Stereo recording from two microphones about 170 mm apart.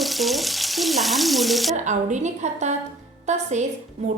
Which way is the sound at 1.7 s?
45° right (ahead or behind).